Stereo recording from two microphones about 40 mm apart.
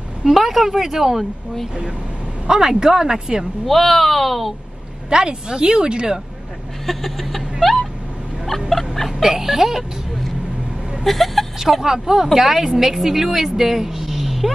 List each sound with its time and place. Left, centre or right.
0.2 s a woman's voice: centre
2.4 s a woman's voice: centre
3.6 s speech: centre
5.1 s speech: centre
6.9 s speech: centre
7.6 s vehicle: centre
8.5 s cat: centre
9.2 s speech: centre
11.8 s a woman's voice: centre